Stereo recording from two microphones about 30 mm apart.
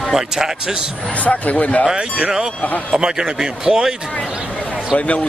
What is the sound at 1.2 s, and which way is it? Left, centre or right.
Speech, left.